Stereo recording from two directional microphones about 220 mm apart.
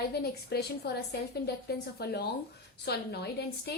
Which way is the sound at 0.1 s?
45° left (ahead or behind).